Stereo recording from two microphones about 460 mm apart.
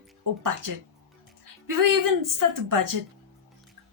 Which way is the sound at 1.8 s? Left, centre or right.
Right.